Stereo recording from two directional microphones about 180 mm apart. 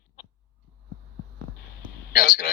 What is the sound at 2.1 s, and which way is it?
Speech, 50° left (ahead or behind).